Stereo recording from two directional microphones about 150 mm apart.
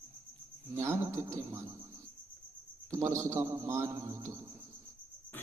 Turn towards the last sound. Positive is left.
turn(degrees=-20)  # may be behind; listen again after turning